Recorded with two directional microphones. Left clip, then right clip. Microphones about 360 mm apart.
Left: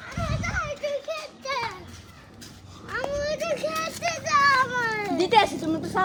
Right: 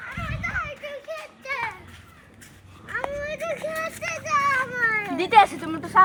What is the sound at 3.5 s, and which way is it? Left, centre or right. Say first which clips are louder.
Children playing: left 1 dB; left.